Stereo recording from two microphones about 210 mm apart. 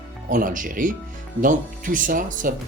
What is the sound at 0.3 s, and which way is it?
Speech, 40° right (ahead or behind).